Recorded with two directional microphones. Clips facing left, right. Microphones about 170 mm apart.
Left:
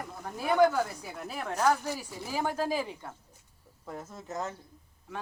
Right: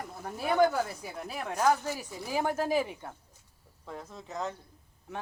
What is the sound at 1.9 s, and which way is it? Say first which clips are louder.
Speech: right 1 dB; 15° right (ahead or behind).